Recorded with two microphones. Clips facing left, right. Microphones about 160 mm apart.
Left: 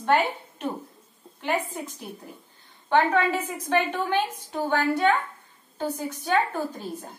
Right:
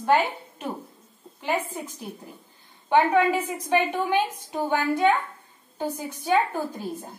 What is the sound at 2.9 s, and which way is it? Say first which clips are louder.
A woman's voice: right 2 dB; 10° right (ahead or behind).